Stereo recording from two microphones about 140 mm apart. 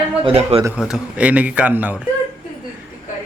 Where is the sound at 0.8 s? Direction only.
5° right (ahead or behind).